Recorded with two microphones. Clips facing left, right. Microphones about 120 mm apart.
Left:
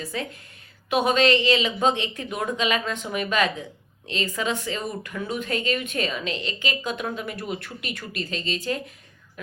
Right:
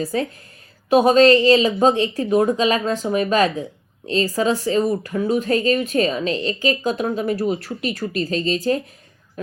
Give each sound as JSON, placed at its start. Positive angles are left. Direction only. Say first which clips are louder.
{"t": 0.0, "sound": "speech", "louder": "right 9 dB", "side_deg": -40}